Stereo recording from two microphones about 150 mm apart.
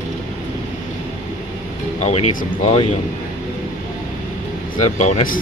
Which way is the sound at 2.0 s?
50° left (ahead or behind).